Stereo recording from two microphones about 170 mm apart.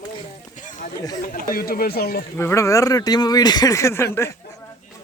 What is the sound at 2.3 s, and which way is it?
Speech, 15° left (ahead or behind).